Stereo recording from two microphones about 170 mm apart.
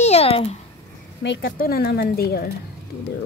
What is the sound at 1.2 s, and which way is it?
Speech, 80° left.